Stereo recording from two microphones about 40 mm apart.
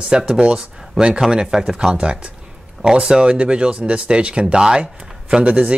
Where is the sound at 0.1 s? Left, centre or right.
Right.